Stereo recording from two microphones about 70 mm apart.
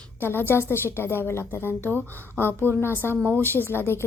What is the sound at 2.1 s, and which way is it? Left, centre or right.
Speech, right.